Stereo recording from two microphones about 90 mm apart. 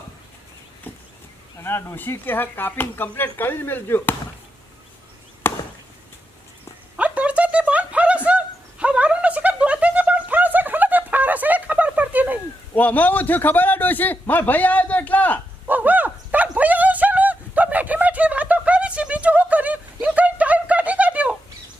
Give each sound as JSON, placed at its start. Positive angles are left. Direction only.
{"t": 1.6, "sound": "speech", "side_deg": 25}
{"t": 5.5, "sound": "chop", "side_deg": 25}
{"t": 6.9, "sound": "a sound", "side_deg": -15}
{"t": 12.7, "sound": "a man's voice", "side_deg": 20}
{"t": 15.6, "sound": "dog", "side_deg": -20}